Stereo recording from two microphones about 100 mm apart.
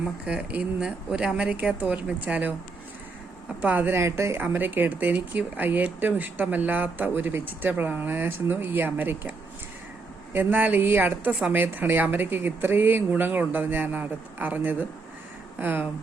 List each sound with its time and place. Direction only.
0.3 s speech: 10° right (ahead or behind)
3.6 s speech: 15° right (ahead or behind)
10.3 s speech: 15° right (ahead or behind)